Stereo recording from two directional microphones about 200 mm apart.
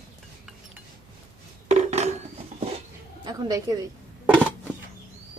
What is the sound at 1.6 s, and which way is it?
Dishes, 35° right (ahead or behind).